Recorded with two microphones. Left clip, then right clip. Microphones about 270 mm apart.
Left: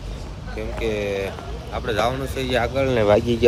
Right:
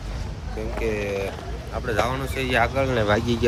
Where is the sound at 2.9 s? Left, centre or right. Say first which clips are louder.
Left 5 dB; left.